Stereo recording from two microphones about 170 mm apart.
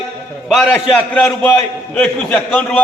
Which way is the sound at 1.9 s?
5° left (ahead or behind).